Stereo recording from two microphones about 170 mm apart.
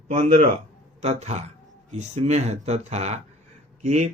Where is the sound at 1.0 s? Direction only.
40° right (ahead or behind).